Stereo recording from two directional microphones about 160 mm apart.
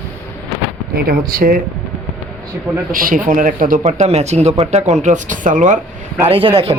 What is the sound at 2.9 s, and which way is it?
Speech, 60° right (ahead or behind).